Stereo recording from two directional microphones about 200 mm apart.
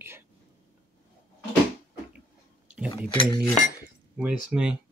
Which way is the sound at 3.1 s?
20° left (ahead or behind).